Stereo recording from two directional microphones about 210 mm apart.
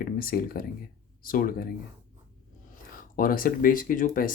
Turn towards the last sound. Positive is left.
turn(degrees=40)  # may be behind; listen again after turning